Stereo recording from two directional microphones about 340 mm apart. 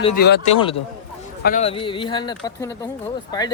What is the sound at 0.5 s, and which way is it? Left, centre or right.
Speech, centre.